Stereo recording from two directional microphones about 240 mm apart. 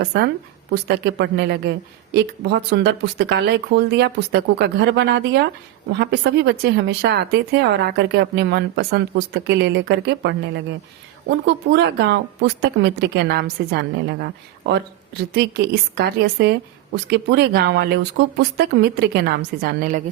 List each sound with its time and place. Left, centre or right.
0.7 s a woman's voice: right